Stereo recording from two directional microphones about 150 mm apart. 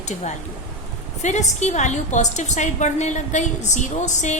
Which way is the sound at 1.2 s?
50° left (ahead or behind).